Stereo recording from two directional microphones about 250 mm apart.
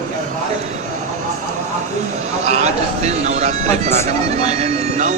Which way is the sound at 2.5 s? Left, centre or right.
Right.